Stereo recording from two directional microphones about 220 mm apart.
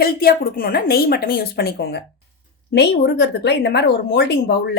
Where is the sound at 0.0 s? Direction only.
45° left (ahead or behind).